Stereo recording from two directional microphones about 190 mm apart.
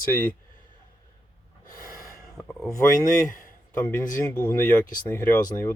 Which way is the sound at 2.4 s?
Centre (ahead or behind).